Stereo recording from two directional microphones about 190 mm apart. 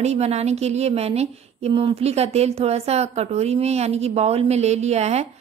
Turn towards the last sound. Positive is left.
turn(degrees=-35)  # may be behind; listen again after turning